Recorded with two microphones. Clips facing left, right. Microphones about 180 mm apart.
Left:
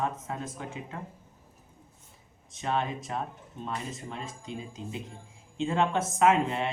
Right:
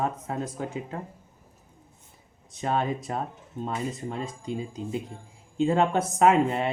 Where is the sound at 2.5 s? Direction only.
40° right (ahead or behind).